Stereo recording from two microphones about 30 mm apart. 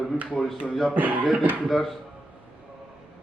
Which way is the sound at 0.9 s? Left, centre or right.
Right.